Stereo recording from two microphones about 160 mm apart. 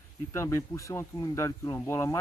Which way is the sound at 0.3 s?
15° left (ahead or behind).